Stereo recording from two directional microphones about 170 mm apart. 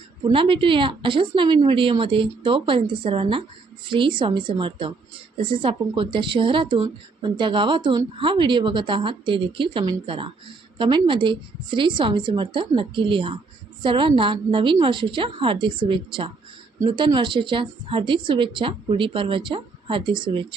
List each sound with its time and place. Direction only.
0.3 s a woman's voice: 30° right (ahead or behind)